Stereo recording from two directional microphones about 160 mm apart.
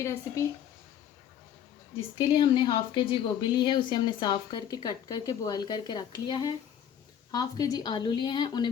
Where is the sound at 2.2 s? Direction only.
30° left (ahead or behind).